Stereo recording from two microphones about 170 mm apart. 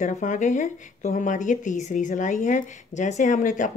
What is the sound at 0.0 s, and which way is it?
Speech, 45° left (ahead or behind).